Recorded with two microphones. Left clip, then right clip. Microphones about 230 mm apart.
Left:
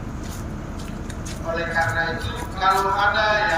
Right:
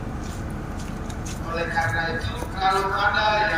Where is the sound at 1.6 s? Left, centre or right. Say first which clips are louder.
Left 2 dB; left.